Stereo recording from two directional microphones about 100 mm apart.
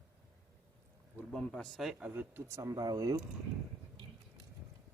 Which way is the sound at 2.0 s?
20° right (ahead or behind).